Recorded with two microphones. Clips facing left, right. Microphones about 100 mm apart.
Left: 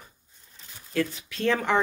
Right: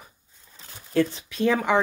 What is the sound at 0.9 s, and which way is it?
Speech, 30° right (ahead or behind).